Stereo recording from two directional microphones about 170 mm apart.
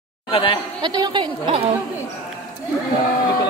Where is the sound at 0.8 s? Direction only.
25° right (ahead or behind).